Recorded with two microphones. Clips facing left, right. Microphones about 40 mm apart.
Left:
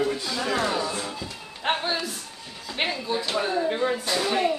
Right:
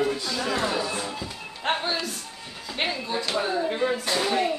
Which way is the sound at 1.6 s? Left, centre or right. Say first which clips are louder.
Left 1 dB; centre.